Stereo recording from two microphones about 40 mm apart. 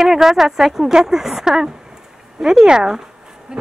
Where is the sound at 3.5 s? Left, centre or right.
Right.